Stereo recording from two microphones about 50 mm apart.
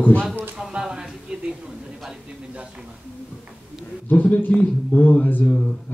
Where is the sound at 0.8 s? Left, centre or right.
Centre.